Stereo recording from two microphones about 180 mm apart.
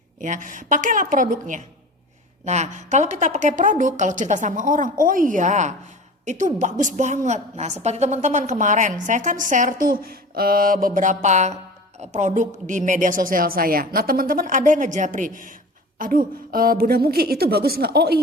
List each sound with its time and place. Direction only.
0.2 s a woman's voice: 45° right (ahead or behind)